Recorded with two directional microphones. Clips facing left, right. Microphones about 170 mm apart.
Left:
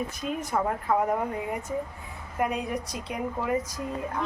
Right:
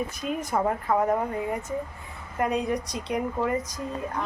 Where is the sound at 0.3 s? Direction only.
10° right (ahead or behind).